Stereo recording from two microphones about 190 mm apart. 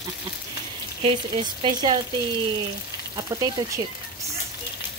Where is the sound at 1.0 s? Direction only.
25° right (ahead or behind).